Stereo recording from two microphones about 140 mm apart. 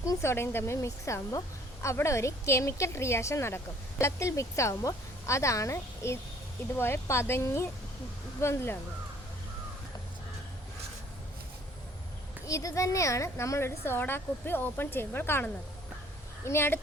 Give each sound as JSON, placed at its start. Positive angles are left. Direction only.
{"t": 0.0, "sound": "a woman's voice", "side_deg": 20}
{"t": 12.5, "sound": "a woman's voice", "side_deg": 20}
{"t": 16.5, "sound": "a woman's voice", "side_deg": 15}